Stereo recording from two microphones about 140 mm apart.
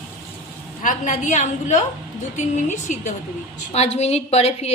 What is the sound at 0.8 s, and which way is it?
A woman's voice, 65° left (ahead or behind).